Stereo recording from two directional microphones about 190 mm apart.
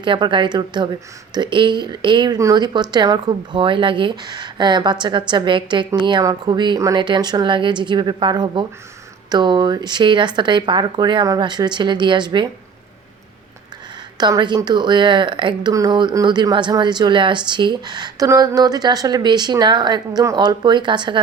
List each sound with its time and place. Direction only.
0.0 s speech: 25° right (ahead or behind)
14.2 s speech: 20° right (ahead or behind)